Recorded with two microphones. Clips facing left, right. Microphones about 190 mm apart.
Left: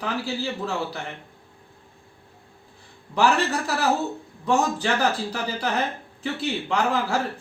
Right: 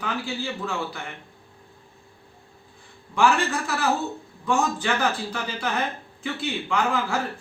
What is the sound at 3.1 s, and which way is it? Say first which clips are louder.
A man's voice: even; 35° left (ahead or behind).